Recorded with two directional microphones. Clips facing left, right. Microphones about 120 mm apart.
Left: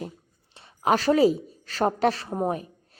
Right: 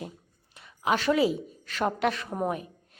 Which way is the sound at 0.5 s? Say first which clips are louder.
Left 4 dB; 35° left (ahead or behind).